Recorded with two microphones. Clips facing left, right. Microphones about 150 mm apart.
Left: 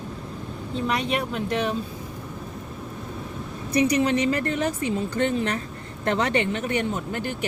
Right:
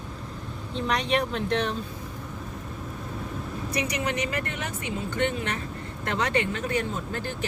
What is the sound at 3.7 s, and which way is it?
A woman's voice, 30° left (ahead or behind).